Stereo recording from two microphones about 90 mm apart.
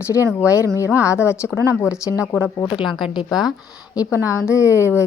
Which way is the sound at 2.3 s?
25° left (ahead or behind).